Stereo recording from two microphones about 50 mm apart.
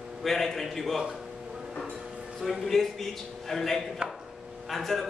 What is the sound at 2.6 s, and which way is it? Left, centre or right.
A man's voice, centre.